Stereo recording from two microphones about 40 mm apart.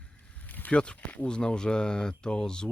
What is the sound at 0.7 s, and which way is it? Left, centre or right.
Speech, left.